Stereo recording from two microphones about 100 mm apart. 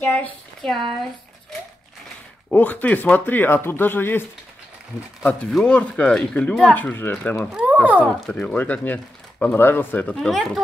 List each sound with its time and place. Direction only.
0.0 s speech: 15° left (ahead or behind)
0.6 s speech: centre (ahead or behind)
2.5 s speech: 15° left (ahead or behind)
5.5 s speech: 10° left (ahead or behind)
7.5 s speech: 15° right (ahead or behind)
8.3 s speech: 10° left (ahead or behind)
10.1 s speech: centre (ahead or behind)